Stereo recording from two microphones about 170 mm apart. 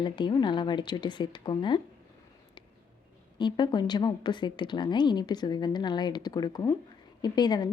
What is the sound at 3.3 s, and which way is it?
Speech, 25° left (ahead or behind).